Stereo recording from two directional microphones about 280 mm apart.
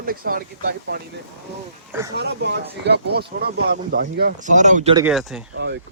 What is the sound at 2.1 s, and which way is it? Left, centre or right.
Speech, right.